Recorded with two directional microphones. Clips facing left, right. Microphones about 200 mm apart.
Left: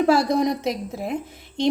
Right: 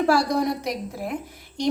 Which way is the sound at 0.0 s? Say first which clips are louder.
Left 2 dB; 20° left (ahead or behind).